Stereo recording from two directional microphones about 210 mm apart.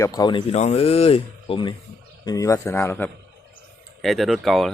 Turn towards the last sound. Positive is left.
turn(degrees=0)  # may be behind; listen again after turning